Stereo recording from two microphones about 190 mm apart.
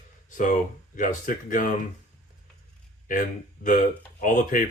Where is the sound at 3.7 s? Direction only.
45° left (ahead or behind).